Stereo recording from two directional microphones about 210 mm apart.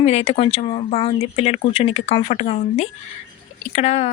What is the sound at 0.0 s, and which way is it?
A woman's voice, 30° left (ahead or behind).